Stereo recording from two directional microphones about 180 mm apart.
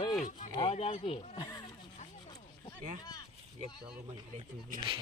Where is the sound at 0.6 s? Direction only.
30° left (ahead or behind).